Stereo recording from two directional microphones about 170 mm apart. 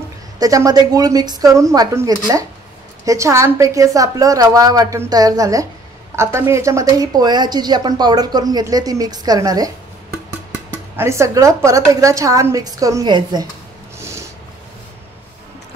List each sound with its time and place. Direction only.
0.4 s speech: 20° right (ahead or behind)
11.0 s speech: 15° right (ahead or behind)
13.9 s snort: 15° right (ahead or behind)